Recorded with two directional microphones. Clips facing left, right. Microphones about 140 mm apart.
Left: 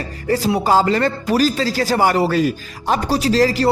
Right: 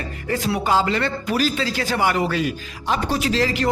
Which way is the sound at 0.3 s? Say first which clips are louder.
Left 5 dB; 35° left (ahead or behind).